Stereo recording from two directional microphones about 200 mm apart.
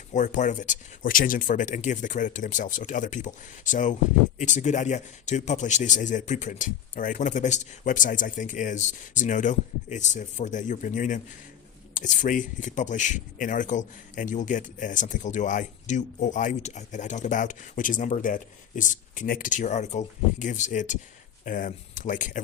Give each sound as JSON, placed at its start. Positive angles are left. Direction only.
{"t": 0.1, "sound": "speech", "side_deg": 40}